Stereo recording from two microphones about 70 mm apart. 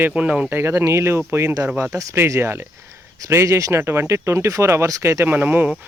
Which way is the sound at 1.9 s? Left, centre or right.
Right.